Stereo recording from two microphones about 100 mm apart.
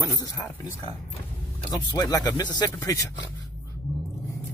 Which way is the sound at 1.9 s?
40° left (ahead or behind).